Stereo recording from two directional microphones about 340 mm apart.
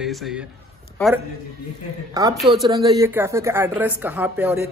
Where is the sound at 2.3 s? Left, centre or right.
Centre.